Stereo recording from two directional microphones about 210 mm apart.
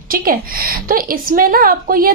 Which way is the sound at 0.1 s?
45° right (ahead or behind).